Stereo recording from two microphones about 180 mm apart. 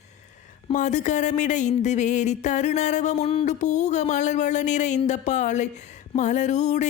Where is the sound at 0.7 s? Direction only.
40° left (ahead or behind).